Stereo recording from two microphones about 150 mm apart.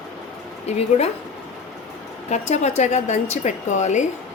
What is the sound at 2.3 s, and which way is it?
A woman's voice, 50° left (ahead or behind).